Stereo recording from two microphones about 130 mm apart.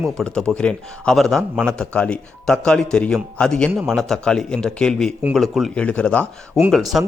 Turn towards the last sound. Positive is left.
turn(degrees=0)  # may be behind; listen again after turning